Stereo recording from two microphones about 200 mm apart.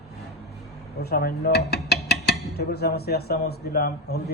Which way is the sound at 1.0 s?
55° left (ahead or behind).